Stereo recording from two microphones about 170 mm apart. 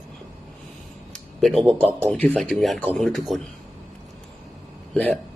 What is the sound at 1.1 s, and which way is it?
Speech, centre (ahead or behind).